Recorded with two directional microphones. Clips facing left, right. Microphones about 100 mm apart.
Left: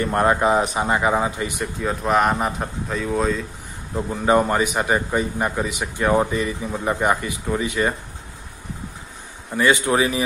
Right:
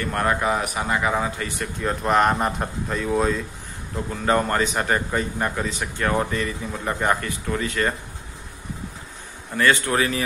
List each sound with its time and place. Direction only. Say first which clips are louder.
0.0 s speech: left 4 dB; 20° left (ahead or behind)
1.8 s speech: even; centre (ahead or behind)
3.9 s a man's voice: left 4 dB; 15° left (ahead or behind)
9.6 s a man's voice: left 2 dB; 15° left (ahead or behind)